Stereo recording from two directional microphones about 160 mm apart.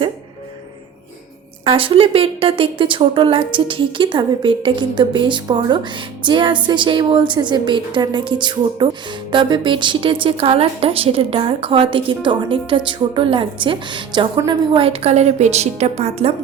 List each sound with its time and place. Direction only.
1.6 s a woman's voice: 35° right (ahead or behind)